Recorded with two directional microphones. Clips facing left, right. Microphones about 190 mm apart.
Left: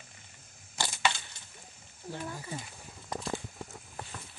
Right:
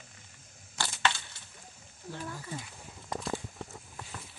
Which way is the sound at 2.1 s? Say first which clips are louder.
Left 1 dB; 15° left (ahead or behind).